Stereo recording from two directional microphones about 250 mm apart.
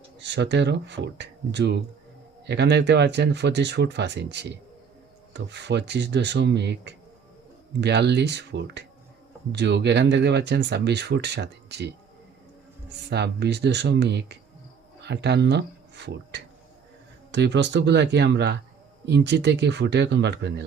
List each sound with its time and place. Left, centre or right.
0.2 s speech: right
13.1 s speech: right